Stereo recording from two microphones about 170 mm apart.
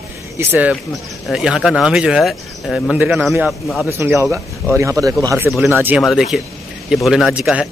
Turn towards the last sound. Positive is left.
turn(degrees=-5)  # may be behind; listen again after turning